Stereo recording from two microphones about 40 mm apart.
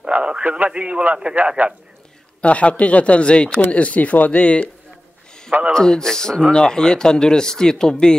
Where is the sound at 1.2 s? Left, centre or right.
Right.